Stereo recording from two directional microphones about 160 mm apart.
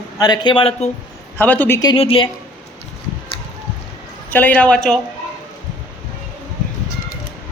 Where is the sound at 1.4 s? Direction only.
10° left (ahead or behind).